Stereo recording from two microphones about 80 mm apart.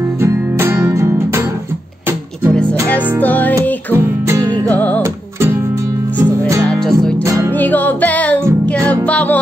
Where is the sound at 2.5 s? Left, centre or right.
Centre.